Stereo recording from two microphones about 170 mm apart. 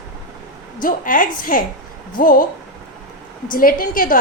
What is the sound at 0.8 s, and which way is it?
A woman's voice, 55° left (ahead or behind).